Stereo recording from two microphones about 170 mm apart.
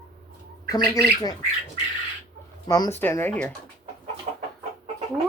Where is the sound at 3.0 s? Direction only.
10° left (ahead or behind).